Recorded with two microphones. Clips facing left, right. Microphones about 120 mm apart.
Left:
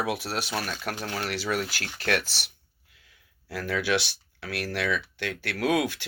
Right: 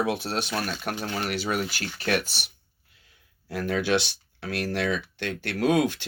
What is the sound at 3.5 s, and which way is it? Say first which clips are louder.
Speech: right 2 dB; 20° right (ahead or behind).